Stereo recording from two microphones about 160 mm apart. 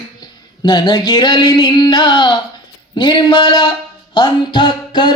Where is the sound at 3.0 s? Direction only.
30° left (ahead or behind).